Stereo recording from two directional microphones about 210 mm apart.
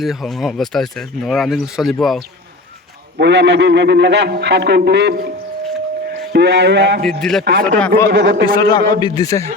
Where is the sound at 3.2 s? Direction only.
55° right (ahead or behind).